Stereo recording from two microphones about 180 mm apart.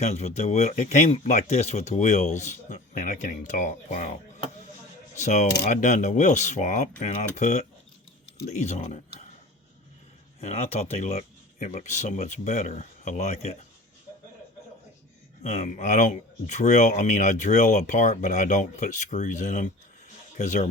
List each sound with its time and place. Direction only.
0.0 s speech: 35° left (ahead or behind)
10.4 s speech: 35° left (ahead or behind)
15.4 s speech: 40° left (ahead or behind)